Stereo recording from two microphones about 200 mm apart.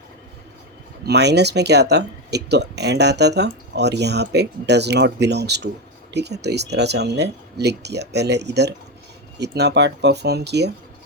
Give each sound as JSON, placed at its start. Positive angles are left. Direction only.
{"t": 1.0, "sound": "speech", "side_deg": -55}